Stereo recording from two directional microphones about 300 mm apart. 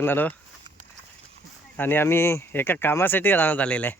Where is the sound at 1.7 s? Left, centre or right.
Centre.